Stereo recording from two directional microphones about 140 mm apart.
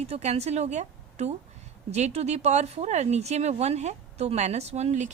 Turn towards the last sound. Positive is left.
turn(degrees=-55)  # may be behind; listen again after turning